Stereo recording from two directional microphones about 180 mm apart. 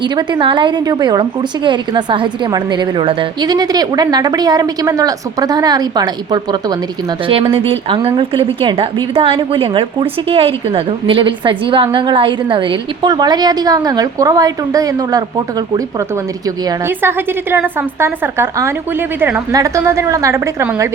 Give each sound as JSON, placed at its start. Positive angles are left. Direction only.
{"t": 0.0, "sound": "a woman's voice", "side_deg": -25}